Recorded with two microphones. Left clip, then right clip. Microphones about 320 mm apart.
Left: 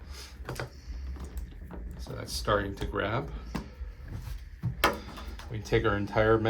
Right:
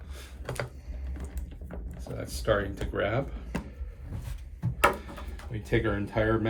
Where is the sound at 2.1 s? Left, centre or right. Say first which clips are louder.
Right 1 dB; centre.